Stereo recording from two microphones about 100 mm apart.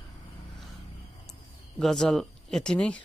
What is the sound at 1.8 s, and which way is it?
Speech, 5° left (ahead or behind).